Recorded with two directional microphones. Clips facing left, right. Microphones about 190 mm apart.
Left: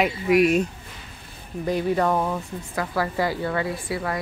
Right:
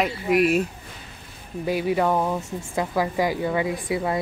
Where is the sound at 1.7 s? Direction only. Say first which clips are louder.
Even; 5° right (ahead or behind).